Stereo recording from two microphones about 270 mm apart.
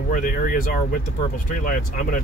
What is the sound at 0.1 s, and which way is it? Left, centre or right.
Speech, left.